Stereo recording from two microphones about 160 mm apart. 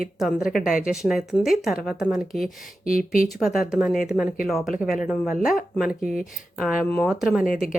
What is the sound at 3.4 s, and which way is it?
Speech, centre (ahead or behind).